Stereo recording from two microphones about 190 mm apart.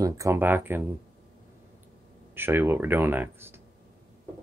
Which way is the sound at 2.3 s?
10° right (ahead or behind).